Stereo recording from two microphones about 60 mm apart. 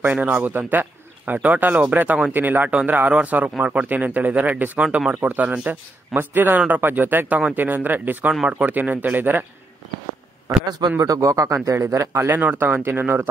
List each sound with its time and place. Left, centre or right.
0.0 s speech: right
4.8 s speech: centre
5.2 s speech: right
11.0 s speech: right
12.3 s speech: right
12.5 s speech: right